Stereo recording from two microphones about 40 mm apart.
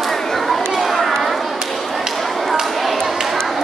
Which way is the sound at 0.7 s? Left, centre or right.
Centre.